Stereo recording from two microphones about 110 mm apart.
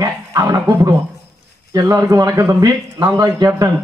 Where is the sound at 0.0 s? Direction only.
35° right (ahead or behind).